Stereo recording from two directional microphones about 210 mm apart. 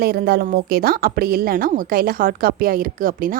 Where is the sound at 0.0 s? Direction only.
45° right (ahead or behind).